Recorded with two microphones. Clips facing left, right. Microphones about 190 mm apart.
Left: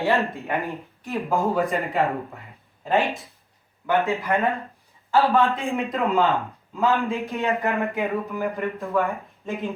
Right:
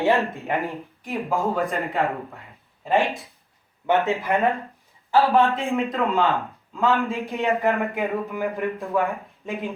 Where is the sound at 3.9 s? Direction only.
15° right (ahead or behind).